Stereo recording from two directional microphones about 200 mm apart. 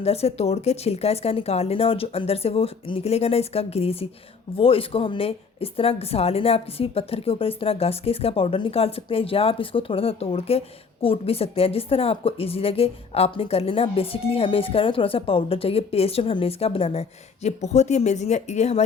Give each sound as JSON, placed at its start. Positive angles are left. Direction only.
{"t": 0.0, "sound": "speech", "side_deg": 30}